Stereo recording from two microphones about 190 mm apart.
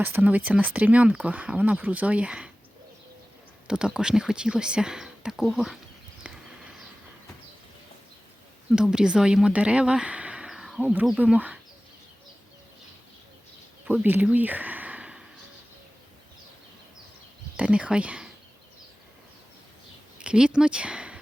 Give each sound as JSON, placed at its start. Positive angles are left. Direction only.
{"t": 0.0, "sound": "speech", "side_deg": -10}
{"t": 3.7, "sound": "speech", "side_deg": -5}
{"t": 6.3, "sound": "a sound", "side_deg": -5}
{"t": 8.7, "sound": "speech", "side_deg": -5}
{"t": 13.8, "sound": "a sound", "side_deg": -10}
{"t": 17.6, "sound": "speech", "side_deg": -5}
{"t": 20.1, "sound": "speech", "side_deg": -5}